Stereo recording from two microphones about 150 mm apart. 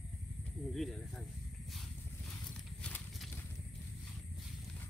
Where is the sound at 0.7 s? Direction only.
Centre (ahead or behind).